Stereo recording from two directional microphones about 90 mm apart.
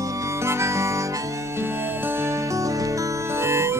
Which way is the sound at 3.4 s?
30° right (ahead or behind).